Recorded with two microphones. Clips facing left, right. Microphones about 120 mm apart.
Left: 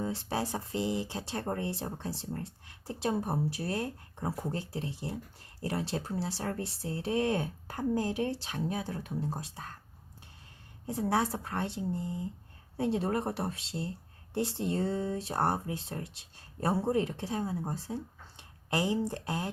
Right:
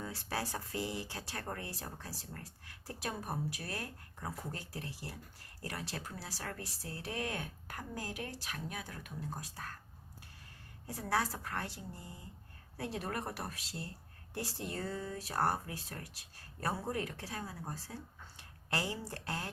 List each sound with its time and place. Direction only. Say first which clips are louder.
0.0 s speech: left 7 dB; 25° left (ahead or behind)
10.8 s speech: left 6 dB; 25° left (ahead or behind)